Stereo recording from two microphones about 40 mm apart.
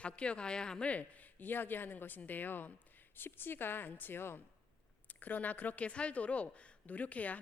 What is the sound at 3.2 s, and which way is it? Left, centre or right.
A woman's voice, left.